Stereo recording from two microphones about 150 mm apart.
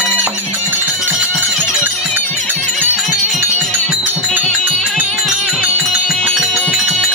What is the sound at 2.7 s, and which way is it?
Music, centre (ahead or behind).